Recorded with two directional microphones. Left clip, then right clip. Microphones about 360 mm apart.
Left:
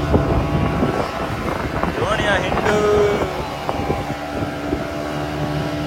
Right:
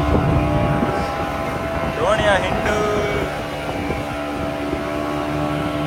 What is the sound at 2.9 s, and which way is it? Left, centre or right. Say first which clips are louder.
Music: left 5 dB; centre.